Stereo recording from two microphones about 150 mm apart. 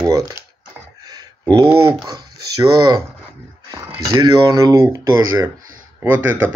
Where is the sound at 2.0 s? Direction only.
25° right (ahead or behind).